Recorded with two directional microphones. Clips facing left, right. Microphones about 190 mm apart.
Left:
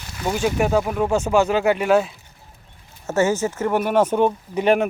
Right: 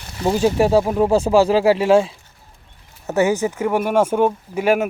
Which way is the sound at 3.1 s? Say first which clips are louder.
Right 2 dB; 15° right (ahead or behind).